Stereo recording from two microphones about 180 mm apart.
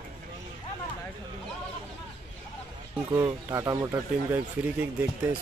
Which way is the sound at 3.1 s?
15° right (ahead or behind).